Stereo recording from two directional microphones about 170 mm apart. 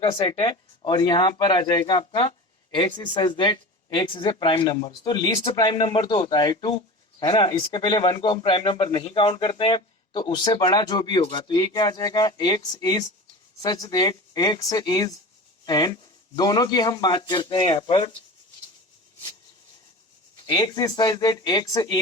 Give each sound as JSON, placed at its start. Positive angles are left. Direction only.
{"t": 0.0, "sound": "a man's voice", "side_deg": 30}
{"t": 20.5, "sound": "a man's voice", "side_deg": 25}